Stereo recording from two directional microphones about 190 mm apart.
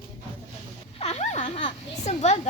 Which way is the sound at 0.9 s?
35° left (ahead or behind).